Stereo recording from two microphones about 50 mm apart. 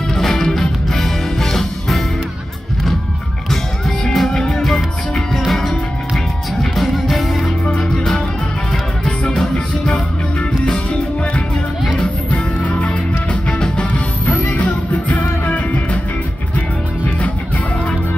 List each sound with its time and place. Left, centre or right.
0.1 s music: centre
4.0 s music: centre
11.8 s music: centre
12.3 s music: left